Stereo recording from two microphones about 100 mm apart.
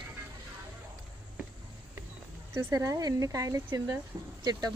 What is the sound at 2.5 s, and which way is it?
Speech, 25° right (ahead or behind).